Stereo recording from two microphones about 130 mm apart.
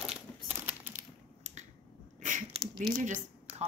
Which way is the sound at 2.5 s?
50° right (ahead or behind).